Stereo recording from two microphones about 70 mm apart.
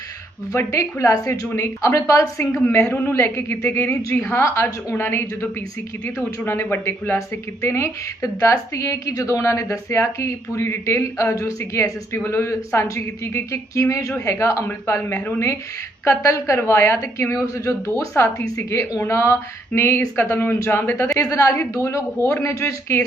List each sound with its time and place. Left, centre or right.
0.7 s a woman's voice: left
2.9 s a woman's voice: left
7.2 s a woman's voice: left
21.2 s a woman's voice: left